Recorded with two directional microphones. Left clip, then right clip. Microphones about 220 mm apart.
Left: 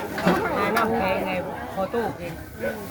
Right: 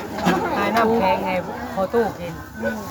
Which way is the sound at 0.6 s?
50° right (ahead or behind).